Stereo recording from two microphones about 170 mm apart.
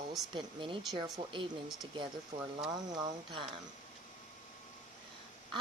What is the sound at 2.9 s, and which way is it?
Speech, 25° right (ahead or behind).